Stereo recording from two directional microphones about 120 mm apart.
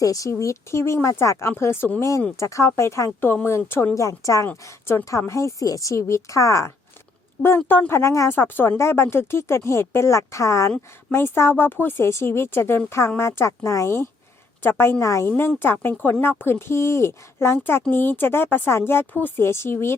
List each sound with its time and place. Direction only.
0.0 s speech: 30° left (ahead or behind)
4.4 s speech: 15° left (ahead or behind)